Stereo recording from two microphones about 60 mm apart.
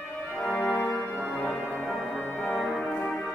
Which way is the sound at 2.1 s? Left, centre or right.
Left.